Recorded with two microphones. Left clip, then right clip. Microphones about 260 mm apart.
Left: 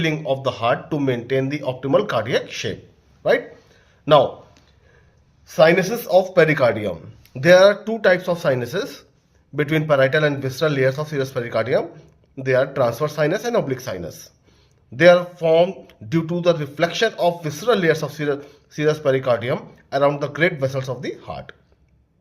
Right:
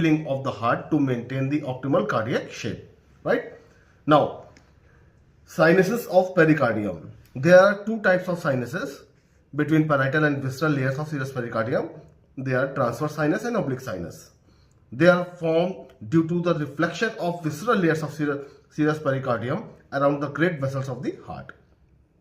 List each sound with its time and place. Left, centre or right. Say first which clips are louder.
0.0 s speech: left 2 dB; left
5.5 s speech: left 4 dB; left